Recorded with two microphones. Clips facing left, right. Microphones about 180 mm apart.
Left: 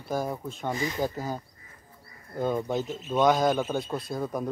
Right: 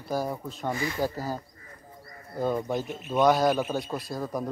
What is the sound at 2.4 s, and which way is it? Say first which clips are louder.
A man's voice: even; centre (ahead or behind).